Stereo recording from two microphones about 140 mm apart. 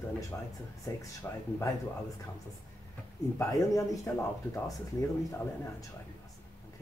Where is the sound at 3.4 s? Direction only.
20° left (ahead or behind).